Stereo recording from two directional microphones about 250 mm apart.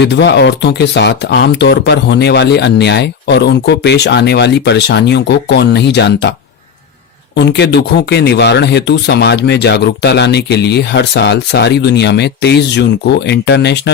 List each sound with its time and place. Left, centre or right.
0.0 s speech: left
7.3 s speech: left